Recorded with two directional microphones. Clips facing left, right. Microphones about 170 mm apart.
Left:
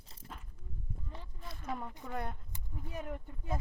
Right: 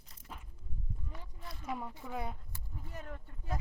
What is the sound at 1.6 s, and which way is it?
Speech, 5° right (ahead or behind).